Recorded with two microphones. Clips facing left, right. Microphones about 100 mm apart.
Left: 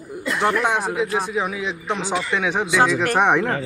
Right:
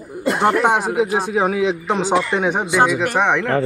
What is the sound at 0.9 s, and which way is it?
A man's voice, 55° right (ahead or behind).